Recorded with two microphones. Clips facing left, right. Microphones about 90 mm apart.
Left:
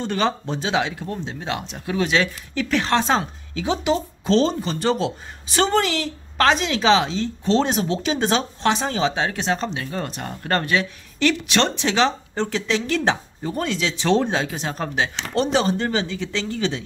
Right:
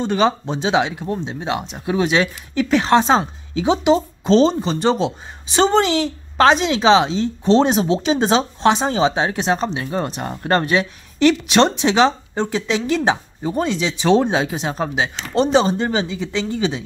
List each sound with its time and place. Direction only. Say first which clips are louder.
0.0 s a woman's voice: right 5 dB; 15° right (ahead or behind)